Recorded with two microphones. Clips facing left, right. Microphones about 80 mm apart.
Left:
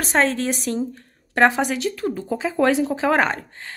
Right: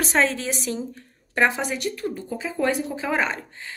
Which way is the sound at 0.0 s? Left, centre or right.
Left.